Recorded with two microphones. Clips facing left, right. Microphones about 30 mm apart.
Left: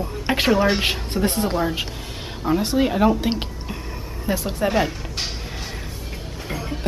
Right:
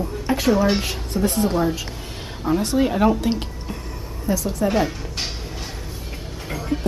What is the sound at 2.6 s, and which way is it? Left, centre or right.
A woman's voice, centre.